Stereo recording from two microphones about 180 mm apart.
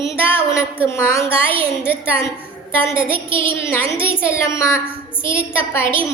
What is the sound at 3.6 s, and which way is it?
A woman's voice, 15° left (ahead or behind).